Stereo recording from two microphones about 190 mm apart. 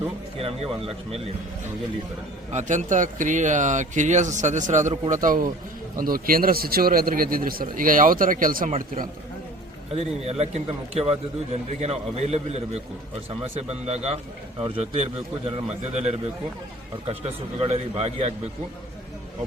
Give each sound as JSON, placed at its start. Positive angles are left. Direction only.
{"t": 0.3, "sound": "speech", "side_deg": -30}
{"t": 2.5, "sound": "a man's voice", "side_deg": -40}
{"t": 9.9, "sound": "speech", "side_deg": -35}